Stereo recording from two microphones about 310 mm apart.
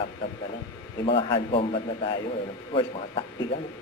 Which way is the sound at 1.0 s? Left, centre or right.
Centre.